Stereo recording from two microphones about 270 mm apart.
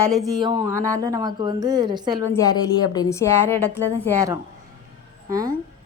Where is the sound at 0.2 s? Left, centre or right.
Centre.